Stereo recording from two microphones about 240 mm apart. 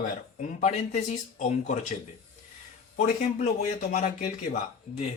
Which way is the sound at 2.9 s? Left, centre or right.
Left.